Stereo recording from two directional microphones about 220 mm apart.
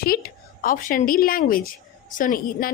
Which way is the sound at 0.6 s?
40° left (ahead or behind).